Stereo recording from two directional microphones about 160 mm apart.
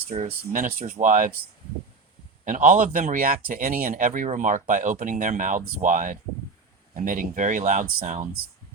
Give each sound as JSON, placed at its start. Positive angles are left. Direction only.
{"t": 0.1, "sound": "speech", "side_deg": -40}
{"t": 0.5, "sound": "speech", "side_deg": -60}
{"t": 2.4, "sound": "speech", "side_deg": -55}